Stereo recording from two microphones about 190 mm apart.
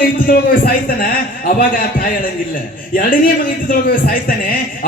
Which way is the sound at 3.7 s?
50° left (ahead or behind).